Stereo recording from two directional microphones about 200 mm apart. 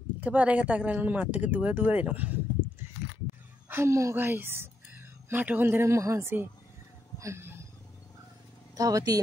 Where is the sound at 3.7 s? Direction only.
15° right (ahead or behind).